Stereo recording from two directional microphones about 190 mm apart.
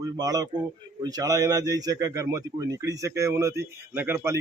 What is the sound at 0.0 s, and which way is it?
A man's voice, 20° right (ahead or behind).